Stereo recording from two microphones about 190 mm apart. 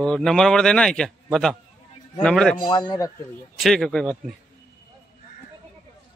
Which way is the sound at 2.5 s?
25° left (ahead or behind).